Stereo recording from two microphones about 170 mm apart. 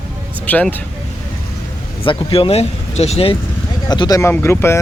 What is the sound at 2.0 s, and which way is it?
Speech, 30° left (ahead or behind).